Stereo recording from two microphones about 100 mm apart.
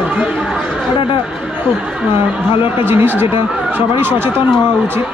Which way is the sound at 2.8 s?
20° right (ahead or behind).